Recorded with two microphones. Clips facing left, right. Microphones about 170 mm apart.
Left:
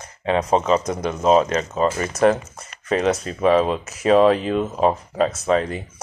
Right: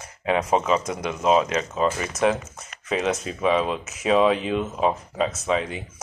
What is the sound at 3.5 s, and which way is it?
Speech, centre (ahead or behind).